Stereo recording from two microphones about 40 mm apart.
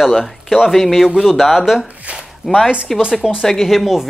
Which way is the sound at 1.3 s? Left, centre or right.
Centre.